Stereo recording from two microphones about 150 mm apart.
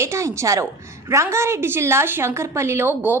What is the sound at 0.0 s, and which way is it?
A woman's voice, 20° right (ahead or behind).